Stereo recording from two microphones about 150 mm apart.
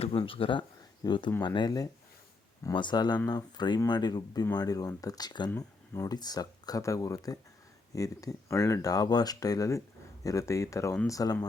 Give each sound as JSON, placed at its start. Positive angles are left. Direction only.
{"t": 0.0, "sound": "speech", "side_deg": 40}